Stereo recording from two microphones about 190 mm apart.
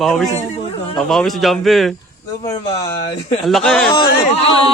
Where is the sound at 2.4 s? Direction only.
20° left (ahead or behind).